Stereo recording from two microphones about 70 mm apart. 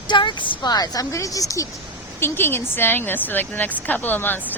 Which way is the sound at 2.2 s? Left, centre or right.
Left.